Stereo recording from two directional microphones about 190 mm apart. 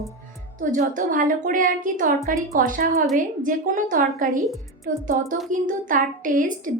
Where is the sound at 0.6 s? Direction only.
45° right (ahead or behind).